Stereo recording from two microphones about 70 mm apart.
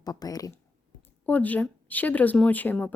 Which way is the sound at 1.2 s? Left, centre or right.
Left.